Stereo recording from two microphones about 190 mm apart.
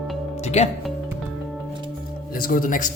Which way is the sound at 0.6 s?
35° left (ahead or behind).